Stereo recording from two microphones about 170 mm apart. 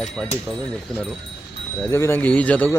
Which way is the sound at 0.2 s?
5° right (ahead or behind).